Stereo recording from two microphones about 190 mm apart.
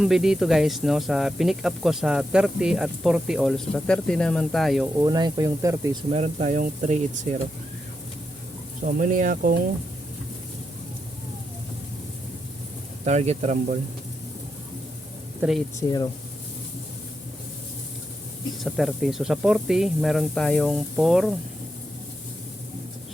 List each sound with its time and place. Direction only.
0.0 s speech: centre (ahead or behind)
4.9 s speech: 20° right (ahead or behind)
6.1 s speech: 35° right (ahead or behind)
8.8 s speech: 45° right (ahead or behind)
13.1 s speech: 35° right (ahead or behind)
15.4 s speech: centre (ahead or behind)
18.6 s speech: centre (ahead or behind)